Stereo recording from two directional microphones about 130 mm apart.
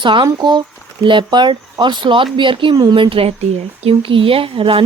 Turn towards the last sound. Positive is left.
turn(degrees=-45)  # may be behind; listen again after turning